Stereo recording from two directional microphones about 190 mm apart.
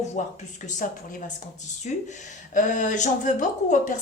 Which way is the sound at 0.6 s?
40° left (ahead or behind).